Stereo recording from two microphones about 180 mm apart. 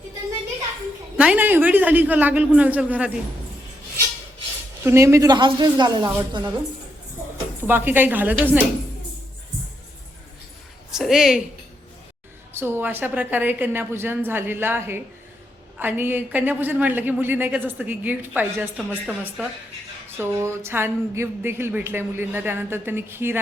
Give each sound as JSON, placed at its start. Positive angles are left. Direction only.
{"t": 1.1, "sound": "a man's voice", "side_deg": -5}
{"t": 4.8, "sound": "a woman's voice", "side_deg": -15}
{"t": 7.7, "sound": "a man's voice", "side_deg": -10}
{"t": 10.9, "sound": "a woman's voice", "side_deg": 0}
{"t": 12.5, "sound": "a man's voice", "side_deg": -10}